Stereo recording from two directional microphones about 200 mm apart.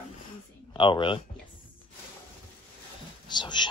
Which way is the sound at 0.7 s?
25° left (ahead or behind).